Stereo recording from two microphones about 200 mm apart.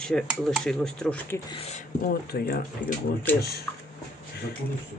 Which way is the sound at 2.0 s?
50° left (ahead or behind).